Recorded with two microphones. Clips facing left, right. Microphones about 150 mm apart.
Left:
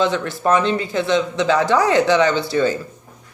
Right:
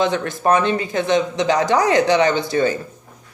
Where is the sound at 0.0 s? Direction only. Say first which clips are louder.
Even; 20° right (ahead or behind).